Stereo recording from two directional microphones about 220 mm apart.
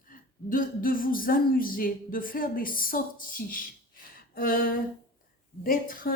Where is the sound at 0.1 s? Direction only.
40° left (ahead or behind).